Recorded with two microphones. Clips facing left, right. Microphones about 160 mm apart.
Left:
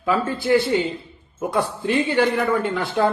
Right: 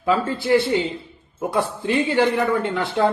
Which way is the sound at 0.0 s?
25° right (ahead or behind).